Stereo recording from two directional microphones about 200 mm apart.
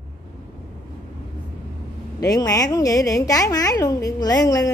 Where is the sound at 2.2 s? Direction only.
15° left (ahead or behind).